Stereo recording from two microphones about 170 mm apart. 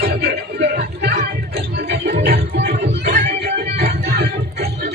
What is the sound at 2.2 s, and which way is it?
Music, 70° right (ahead or behind).